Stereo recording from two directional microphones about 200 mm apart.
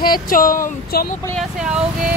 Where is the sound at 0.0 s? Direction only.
45° left (ahead or behind).